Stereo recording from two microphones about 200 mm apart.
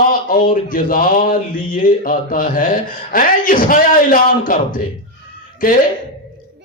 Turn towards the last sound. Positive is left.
turn(degrees=45)  # may be behind; listen again after turning